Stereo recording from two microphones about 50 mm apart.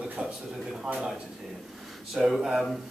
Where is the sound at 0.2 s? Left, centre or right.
Right.